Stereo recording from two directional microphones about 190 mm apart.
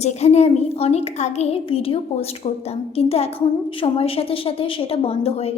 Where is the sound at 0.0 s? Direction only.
35° left (ahead or behind).